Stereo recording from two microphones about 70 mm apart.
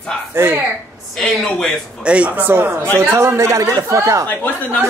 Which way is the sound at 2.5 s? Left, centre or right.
Right.